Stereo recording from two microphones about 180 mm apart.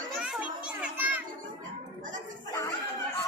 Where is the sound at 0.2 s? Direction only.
5° right (ahead or behind).